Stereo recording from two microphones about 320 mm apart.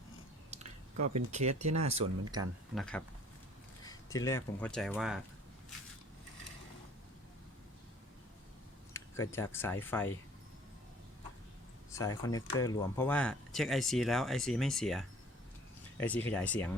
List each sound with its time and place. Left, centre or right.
0.5 s squish: right
1.1 s speech: right
1.7 s speech: right
2.7 s speech: centre
8.9 s speech: centre
11.9 s speech: centre